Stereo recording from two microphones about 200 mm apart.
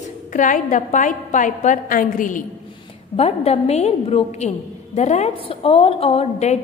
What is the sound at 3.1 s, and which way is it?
A woman's voice, 30° left (ahead or behind).